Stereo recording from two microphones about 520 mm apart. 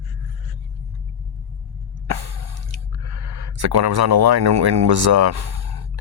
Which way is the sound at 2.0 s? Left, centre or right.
Right.